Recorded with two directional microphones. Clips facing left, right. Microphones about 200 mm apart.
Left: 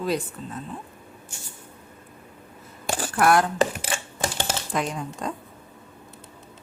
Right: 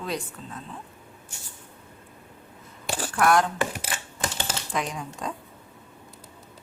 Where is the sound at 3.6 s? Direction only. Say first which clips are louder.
Left 5 dB; 25° left (ahead or behind).